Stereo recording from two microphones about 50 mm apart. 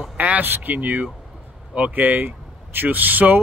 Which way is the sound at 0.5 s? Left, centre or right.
Right.